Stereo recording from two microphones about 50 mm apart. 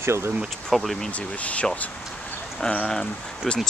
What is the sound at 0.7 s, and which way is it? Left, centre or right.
Speech, centre.